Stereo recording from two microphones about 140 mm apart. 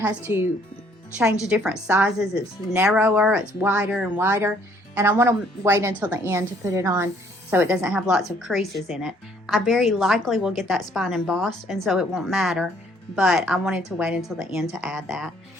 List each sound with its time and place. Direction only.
0.2 s speech: 15° right (ahead or behind)
1.5 s a woman's voice: 5° right (ahead or behind)